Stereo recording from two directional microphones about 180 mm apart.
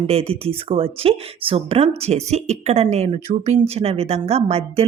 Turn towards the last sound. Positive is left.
turn(degrees=-35)  # may be behind; listen again after turning